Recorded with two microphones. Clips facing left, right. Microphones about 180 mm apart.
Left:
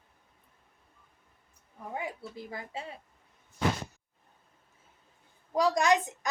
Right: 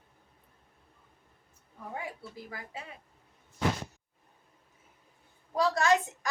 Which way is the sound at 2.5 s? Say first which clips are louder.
Left 5 dB; 30° left (ahead or behind).